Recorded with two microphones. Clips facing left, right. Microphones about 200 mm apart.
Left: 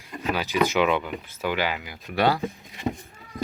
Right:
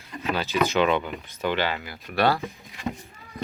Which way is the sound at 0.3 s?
15° left (ahead or behind).